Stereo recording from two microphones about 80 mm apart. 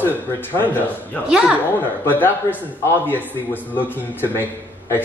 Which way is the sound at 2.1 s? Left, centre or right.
Left.